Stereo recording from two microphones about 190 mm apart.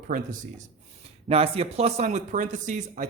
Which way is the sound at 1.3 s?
30° right (ahead or behind).